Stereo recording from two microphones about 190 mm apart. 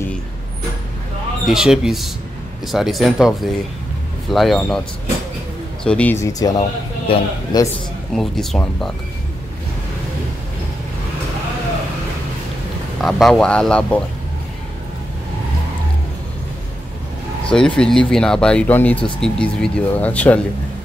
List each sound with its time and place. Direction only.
1.4 s speech: 5° right (ahead or behind)
5.9 s speech: 5° left (ahead or behind)
8.1 s speech: centre (ahead or behind)
13.0 s speech: centre (ahead or behind)
17.6 s speech: 5° left (ahead or behind)